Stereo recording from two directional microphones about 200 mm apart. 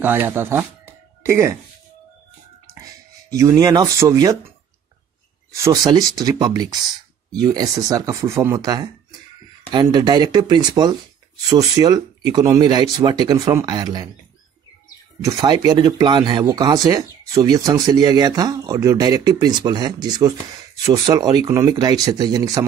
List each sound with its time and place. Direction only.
0.0 s speech: 10° right (ahead or behind)
2.7 s speech: 15° right (ahead or behind)
5.5 s speech: 15° right (ahead or behind)
15.3 s speech: 20° right (ahead or behind)